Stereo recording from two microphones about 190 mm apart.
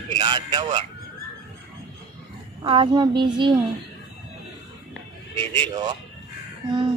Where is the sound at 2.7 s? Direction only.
25° right (ahead or behind).